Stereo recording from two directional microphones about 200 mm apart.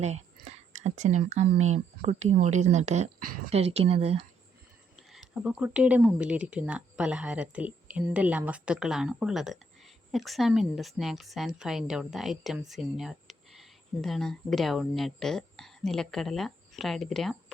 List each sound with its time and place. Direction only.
0.0 s a sound: 35° right (ahead or behind)
1.7 s speech: 35° right (ahead or behind)
5.1 s speech: 5° right (ahead or behind)